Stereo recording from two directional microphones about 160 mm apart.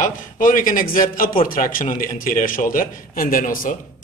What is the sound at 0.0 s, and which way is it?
A man's voice, 55° left (ahead or behind).